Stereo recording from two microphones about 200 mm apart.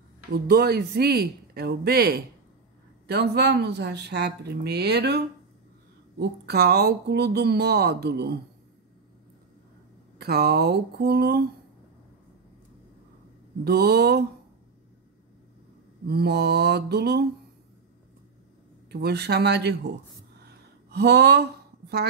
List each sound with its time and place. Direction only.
0.3 s speech: 50° right (ahead or behind)
10.1 s speech: 50° right (ahead or behind)
13.7 s speech: 50° right (ahead or behind)
16.1 s speech: 55° right (ahead or behind)
18.9 s speech: 55° right (ahead or behind)
20.3 s a sound: 55° right (ahead or behind)